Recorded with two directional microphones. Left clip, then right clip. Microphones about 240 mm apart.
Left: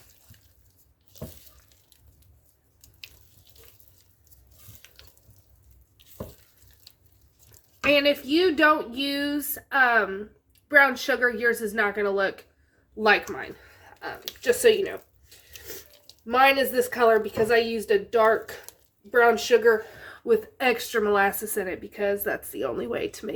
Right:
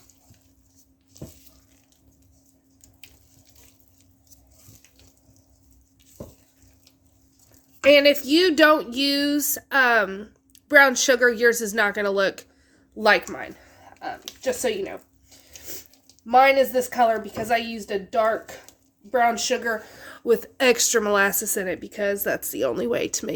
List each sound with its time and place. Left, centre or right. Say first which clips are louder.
7.9 s a woman's voice: right 6 dB; right
14.4 s a woman's voice: left 5 dB; right
16.2 s a woman's voice: right 4 dB; right